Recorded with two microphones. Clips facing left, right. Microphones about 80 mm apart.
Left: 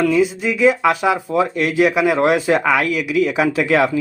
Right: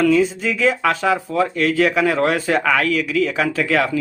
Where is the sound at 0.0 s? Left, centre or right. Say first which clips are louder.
Even; centre.